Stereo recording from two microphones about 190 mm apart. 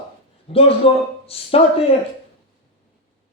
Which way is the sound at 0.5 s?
30° left (ahead or behind).